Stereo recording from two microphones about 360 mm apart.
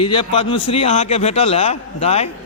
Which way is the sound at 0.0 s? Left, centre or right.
Centre.